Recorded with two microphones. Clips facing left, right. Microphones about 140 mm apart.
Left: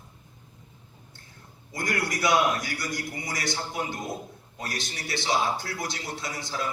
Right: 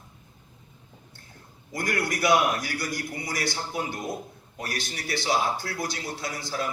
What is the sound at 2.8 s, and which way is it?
Speech, 20° left (ahead or behind).